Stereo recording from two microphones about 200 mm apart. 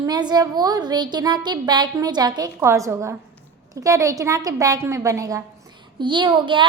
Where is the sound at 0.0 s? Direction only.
20° right (ahead or behind).